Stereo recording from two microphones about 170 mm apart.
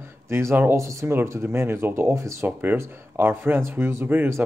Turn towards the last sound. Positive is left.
turn(degrees=-10)  # may be behind; listen again after turning